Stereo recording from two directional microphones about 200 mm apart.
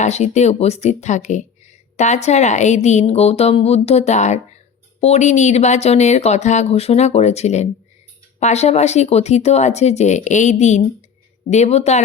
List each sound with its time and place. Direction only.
0.0 s speech: 35° left (ahead or behind)